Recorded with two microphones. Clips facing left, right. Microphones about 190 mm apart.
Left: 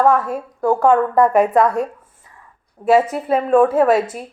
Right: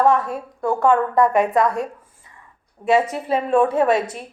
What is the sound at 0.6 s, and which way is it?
Speech, 45° left (ahead or behind).